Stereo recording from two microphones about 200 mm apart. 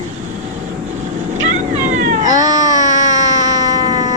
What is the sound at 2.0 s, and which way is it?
Cat, 40° right (ahead or behind).